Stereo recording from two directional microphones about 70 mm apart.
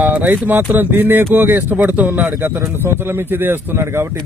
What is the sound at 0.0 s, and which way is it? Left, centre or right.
Speech, right.